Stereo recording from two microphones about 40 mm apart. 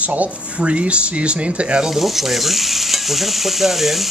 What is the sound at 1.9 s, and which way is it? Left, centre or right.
Stir, centre.